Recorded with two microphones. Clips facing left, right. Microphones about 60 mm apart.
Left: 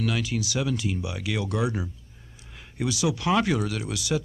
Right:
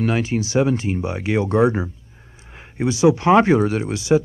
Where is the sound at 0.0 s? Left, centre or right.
Right.